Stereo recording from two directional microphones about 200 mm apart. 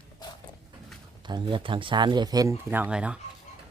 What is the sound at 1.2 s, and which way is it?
Speech, 25° right (ahead or behind).